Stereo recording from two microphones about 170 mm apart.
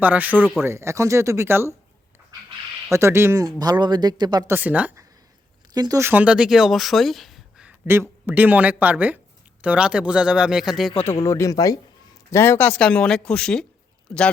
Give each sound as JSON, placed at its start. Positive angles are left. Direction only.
{"t": 0.0, "sound": "speech", "side_deg": -10}
{"t": 2.9, "sound": "speech", "side_deg": -15}
{"t": 4.5, "sound": "speech", "side_deg": -10}
{"t": 5.7, "sound": "speech", "side_deg": -20}
{"t": 7.9, "sound": "a man's voice", "side_deg": -15}
{"t": 11.0, "sound": "a man's voice", "side_deg": 15}